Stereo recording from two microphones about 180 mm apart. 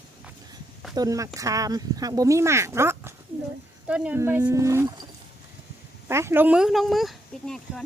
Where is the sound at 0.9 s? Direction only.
20° right (ahead or behind).